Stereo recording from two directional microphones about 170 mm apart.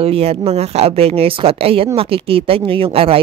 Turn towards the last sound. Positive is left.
turn(degrees=-35)  # may be behind; listen again after turning